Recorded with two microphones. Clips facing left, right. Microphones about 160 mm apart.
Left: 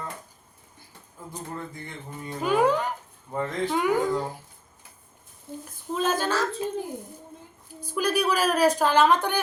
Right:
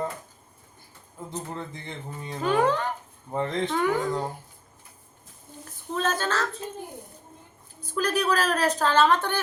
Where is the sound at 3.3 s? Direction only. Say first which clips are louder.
Right 1 dB; 20° right (ahead or behind).